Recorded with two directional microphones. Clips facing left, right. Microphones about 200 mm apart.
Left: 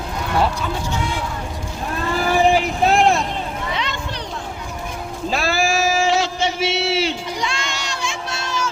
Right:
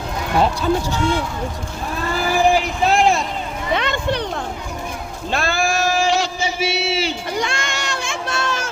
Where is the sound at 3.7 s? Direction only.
55° right (ahead or behind).